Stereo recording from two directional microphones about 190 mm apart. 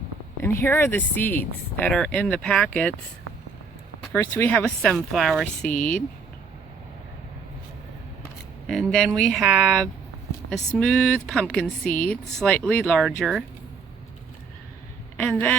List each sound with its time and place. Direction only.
0.4 s speech: 10° left (ahead or behind)
4.0 s speech: 10° left (ahead or behind)
5.7 s speech: 45° left (ahead or behind)
8.6 s speech: centre (ahead or behind)
15.2 s speech: 10° left (ahead or behind)